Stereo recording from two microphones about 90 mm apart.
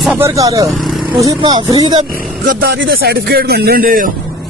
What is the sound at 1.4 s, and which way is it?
Speech, 50° right (ahead or behind).